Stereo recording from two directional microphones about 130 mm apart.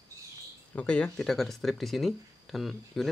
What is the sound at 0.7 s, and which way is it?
Speech, 10° left (ahead or behind).